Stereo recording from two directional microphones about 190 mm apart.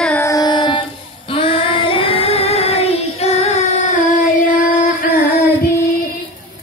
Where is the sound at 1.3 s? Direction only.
30° left (ahead or behind); by 5.4 s 50° left (ahead or behind).